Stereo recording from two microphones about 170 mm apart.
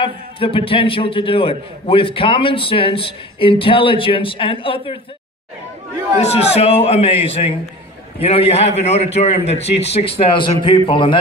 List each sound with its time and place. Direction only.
0.0 s a man's voice: 30° left (ahead or behind)
6.1 s a man's voice: 40° left (ahead or behind)